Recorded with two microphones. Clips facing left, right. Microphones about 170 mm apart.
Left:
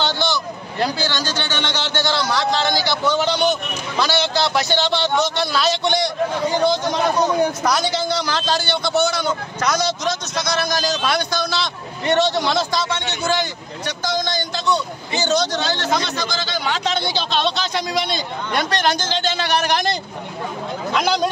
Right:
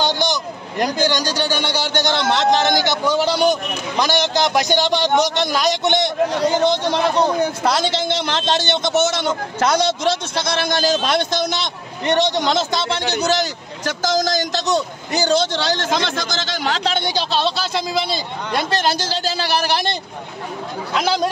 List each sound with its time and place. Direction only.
0.0 s a man's voice: 15° right (ahead or behind)
13.1 s a man's voice: 40° right (ahead or behind)
13.8 s a man's voice: 90° right
14.5 s a man's voice: 40° right (ahead or behind)
15.7 s a man's voice: 45° right (ahead or behind)
17.4 s a man's voice: 5° right (ahead or behind)
18.8 s a man's voice: 30° right (ahead or behind)